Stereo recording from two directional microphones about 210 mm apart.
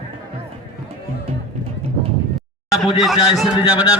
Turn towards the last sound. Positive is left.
turn(degrees=0)  # may be behind; listen again after turning